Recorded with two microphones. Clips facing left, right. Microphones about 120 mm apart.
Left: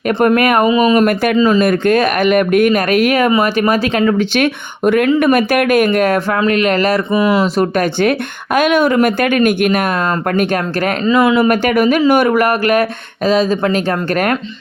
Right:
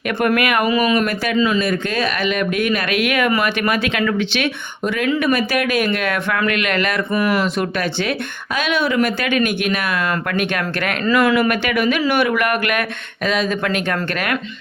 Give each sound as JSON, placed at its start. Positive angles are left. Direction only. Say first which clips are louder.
{"t": 0.3, "sound": "speech", "louder": "left 6 dB", "side_deg": 40}
{"t": 0.6, "sound": "speech", "louder": "left 6 dB", "side_deg": 25}
{"t": 1.0, "sound": "speech", "louder": "left 6 dB", "side_deg": 50}
{"t": 5.2, "sound": "speech", "louder": "left 6 dB", "side_deg": 50}
{"t": 7.1, "sound": "speech", "louder": "left 3 dB", "side_deg": 15}
{"t": 7.4, "sound": "speech", "louder": "left 6 dB", "side_deg": 45}
{"t": 11.0, "sound": "speech", "louder": "left 3 dB", "side_deg": 20}
{"t": 11.4, "sound": "speech", "louder": "left 6 dB", "side_deg": 40}